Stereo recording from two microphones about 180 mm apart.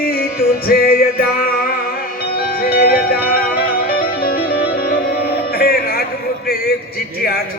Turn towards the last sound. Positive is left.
turn(degrees=55)  # may be behind; listen again after turning